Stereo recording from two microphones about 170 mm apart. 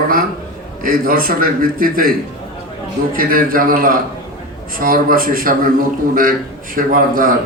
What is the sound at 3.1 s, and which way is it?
A man's voice, 55° right (ahead or behind).